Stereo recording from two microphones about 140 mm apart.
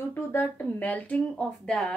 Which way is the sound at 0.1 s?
15° left (ahead or behind).